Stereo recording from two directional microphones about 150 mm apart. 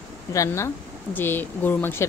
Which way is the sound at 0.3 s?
20° left (ahead or behind).